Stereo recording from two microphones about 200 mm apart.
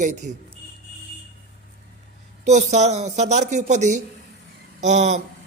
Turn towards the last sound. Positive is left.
turn(degrees=-35)  # may be behind; listen again after turning